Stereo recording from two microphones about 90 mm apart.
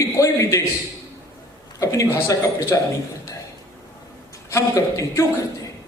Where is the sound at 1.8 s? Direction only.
40° left (ahead or behind).